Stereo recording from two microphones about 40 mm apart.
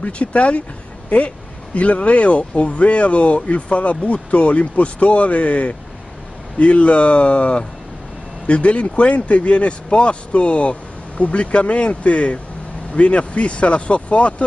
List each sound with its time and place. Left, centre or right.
0.0 s speech: left
1.8 s speech: left